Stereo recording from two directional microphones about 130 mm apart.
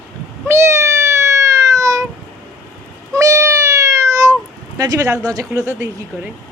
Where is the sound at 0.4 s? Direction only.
20° right (ahead or behind).